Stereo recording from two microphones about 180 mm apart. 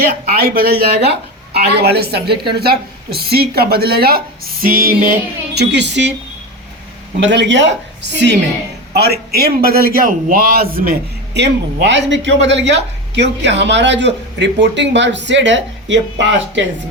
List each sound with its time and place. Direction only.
0.3 s a woman's voice: 55° right (ahead or behind)
5.5 s speech: 75° right (ahead or behind)
7.2 s speech: 85° right
8.9 s a man's voice: 60° right (ahead or behind)
11.3 s speech: 75° right (ahead or behind)